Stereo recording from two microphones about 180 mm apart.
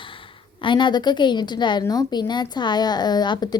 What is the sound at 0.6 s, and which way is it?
A woman's voice, 25° left (ahead or behind).